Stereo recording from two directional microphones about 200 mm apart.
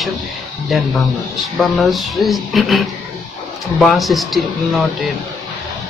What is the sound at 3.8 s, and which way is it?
Speech, centre (ahead or behind).